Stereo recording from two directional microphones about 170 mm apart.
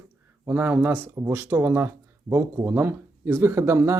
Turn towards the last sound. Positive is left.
turn(degrees=-15)  # may be behind; listen again after turning